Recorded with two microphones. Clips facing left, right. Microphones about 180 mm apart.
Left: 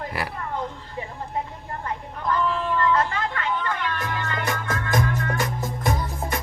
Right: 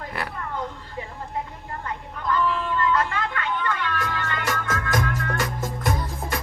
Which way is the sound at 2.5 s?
30° left (ahead or behind).